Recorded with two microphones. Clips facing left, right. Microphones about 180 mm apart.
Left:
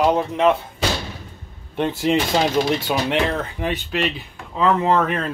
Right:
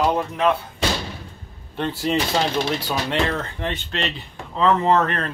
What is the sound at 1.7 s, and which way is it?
Speech, 10° left (ahead or behind).